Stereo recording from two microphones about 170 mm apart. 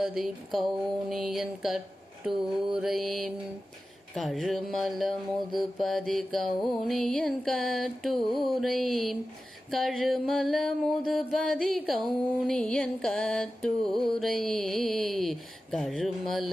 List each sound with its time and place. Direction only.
0.0 s mantra: centre (ahead or behind)